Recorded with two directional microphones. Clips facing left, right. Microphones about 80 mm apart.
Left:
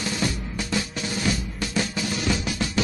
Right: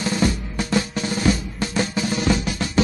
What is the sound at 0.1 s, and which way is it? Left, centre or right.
Drum, right.